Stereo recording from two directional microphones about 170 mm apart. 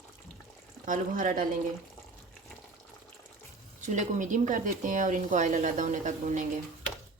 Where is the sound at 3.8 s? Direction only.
45° right (ahead or behind).